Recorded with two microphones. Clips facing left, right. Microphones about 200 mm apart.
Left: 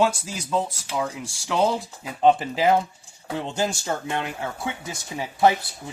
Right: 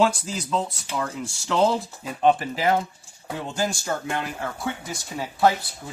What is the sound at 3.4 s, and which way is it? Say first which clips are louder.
Speech: even; 20° left (ahead or behind).